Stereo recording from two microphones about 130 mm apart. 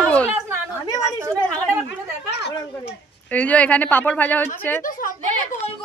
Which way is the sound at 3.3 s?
10° left (ahead or behind).